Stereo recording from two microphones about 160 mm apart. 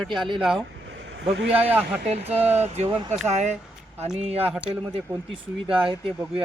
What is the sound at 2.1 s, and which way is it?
Speech, 40° right (ahead or behind).